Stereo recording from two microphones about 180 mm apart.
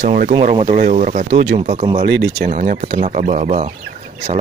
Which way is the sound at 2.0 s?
65° right (ahead or behind).